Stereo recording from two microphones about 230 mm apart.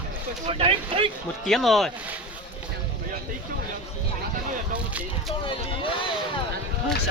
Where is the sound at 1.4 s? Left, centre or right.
Centre.